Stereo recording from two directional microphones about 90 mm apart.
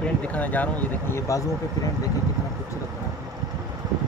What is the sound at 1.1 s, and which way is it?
Speech, 35° left (ahead or behind).